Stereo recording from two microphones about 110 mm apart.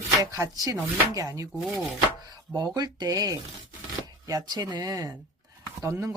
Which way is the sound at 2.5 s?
35° right (ahead or behind).